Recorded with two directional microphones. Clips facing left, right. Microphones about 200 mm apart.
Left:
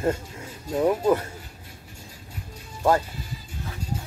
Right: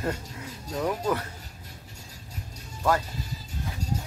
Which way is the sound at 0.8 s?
25° left (ahead or behind).